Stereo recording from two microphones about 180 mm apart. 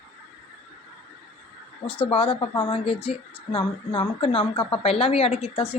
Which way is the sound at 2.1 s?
30° left (ahead or behind).